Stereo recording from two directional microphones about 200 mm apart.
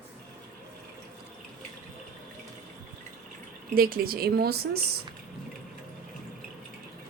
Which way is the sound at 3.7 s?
45° right (ahead or behind).